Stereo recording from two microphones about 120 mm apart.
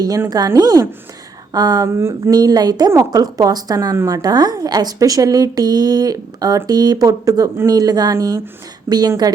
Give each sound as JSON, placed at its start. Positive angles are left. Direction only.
{"t": 0.3, "sound": "a woman's voice", "side_deg": -30}
{"t": 2.0, "sound": "speech", "side_deg": -20}
{"t": 2.3, "sound": "a woman's voice", "side_deg": -35}